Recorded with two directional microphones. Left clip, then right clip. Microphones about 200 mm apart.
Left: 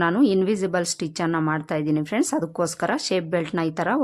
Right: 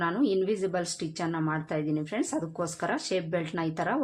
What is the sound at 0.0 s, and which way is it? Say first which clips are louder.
A woman's voice: left 7 dB; 45° left (ahead or behind).